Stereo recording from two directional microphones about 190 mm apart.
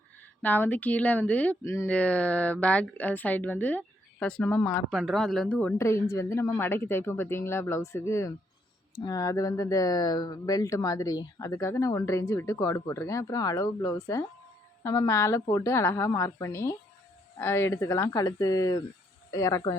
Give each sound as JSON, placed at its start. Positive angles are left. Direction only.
{"t": 0.4, "sound": "speech", "side_deg": 10}